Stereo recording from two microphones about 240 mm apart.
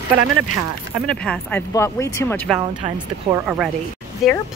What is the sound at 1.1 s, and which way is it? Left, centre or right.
Speech, centre.